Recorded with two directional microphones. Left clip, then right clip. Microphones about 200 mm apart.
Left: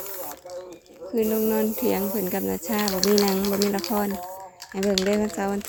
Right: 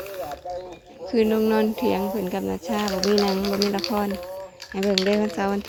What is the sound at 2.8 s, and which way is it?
Speech, 40° left (ahead or behind).